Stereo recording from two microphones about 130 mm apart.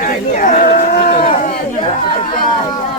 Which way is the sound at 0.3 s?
80° left.